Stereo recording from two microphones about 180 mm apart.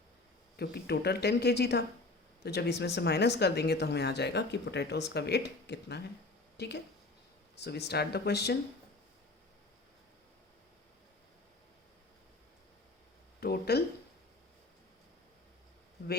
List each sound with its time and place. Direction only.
0.5 s speech: 65° left (ahead or behind)
13.4 s speech: 60° left (ahead or behind)